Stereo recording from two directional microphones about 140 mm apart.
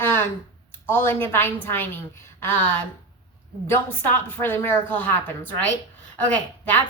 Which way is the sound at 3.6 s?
15° left (ahead or behind).